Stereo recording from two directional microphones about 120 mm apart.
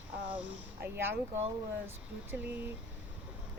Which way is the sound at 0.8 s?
20° right (ahead or behind).